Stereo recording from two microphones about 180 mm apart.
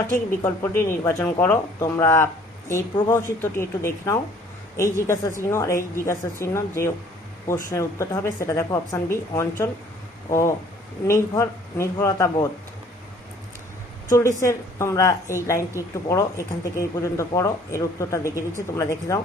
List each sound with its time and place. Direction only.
0.1 s speech: 10° left (ahead or behind)
11.0 s speech: 15° left (ahead or behind)
14.1 s speech: 15° left (ahead or behind)